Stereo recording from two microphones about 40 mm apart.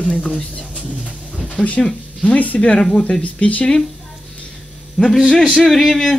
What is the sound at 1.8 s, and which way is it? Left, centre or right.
Speech, centre.